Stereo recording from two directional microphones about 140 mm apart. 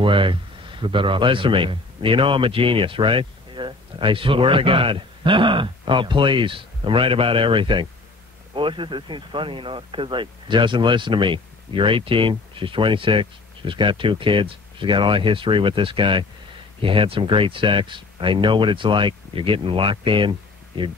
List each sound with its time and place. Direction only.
0.0 s speech: 35° right (ahead or behind)